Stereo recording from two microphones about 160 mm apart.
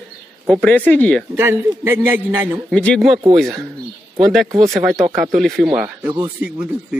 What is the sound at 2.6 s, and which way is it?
Speech, 5° left (ahead or behind).